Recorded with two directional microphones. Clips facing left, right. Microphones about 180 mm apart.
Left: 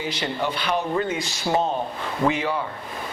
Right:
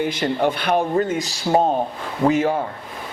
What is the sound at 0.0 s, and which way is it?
Speech, 50° right (ahead or behind).